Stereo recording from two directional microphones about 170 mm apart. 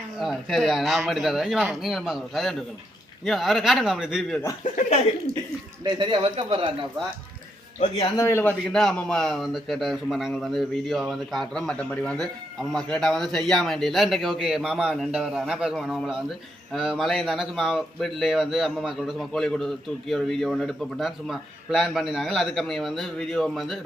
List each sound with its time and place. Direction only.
0.2 s speech: centre (ahead or behind)
5.8 s a man's voice: 30° right (ahead or behind)
7.9 s speech: 20° left (ahead or behind); by 23.8 s centre (ahead or behind)